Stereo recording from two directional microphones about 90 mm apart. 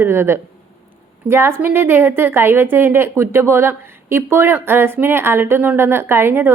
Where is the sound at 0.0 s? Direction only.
25° right (ahead or behind).